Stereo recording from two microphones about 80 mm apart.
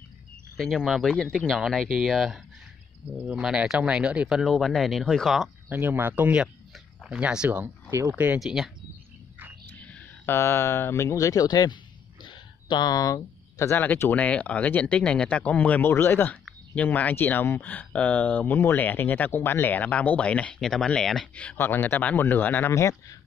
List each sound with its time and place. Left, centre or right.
0.6 s speech: centre
3.1 s speech: centre
4.4 s speech: centre
5.7 s speech: right
7.0 s speech: centre
8.4 s speech: centre
9.7 s a sound: left
10.3 s speech: left
11.4 s a sound: left
13.7 s speech: left
15.8 s speech: left; by 21.5 s centre
21.5 s speech: left
22.7 s speech: left